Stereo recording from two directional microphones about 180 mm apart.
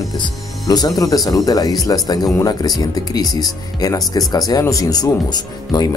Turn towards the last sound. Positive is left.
turn(degrees=20)  # may be behind; listen again after turning